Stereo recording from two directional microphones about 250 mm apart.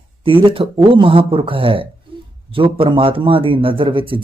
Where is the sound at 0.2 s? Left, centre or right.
Right.